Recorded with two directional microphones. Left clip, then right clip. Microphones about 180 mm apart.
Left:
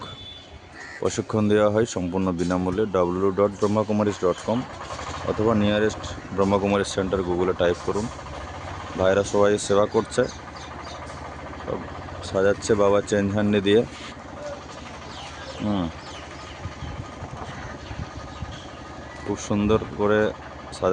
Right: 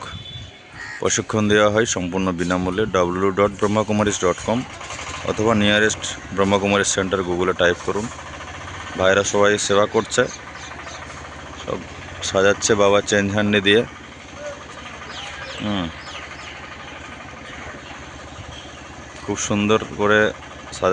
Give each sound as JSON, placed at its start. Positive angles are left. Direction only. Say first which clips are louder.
{"t": 1.0, "sound": "speech", "louder": "right 4 dB", "side_deg": -5}
{"t": 3.1, "sound": "speech", "louder": "right 3 dB", "side_deg": -10}
{"t": 5.3, "sound": "speech", "louder": "right 3 dB", "side_deg": -25}
{"t": 5.5, "sound": "speech", "louder": "right 5 dB", "side_deg": -5}
{"t": 11.7, "sound": "speech", "louder": "right 3 dB", "side_deg": -10}
{"t": 15.6, "sound": "speech", "louder": "right 2 dB", "side_deg": 5}
{"t": 19.3, "sound": "speech", "louder": "right 4 dB", "side_deg": 0}